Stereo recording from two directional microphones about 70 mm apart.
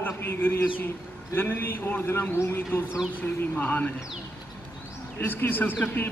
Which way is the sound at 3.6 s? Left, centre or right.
Left.